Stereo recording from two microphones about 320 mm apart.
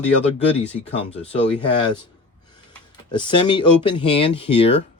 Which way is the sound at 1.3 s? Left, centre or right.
Centre.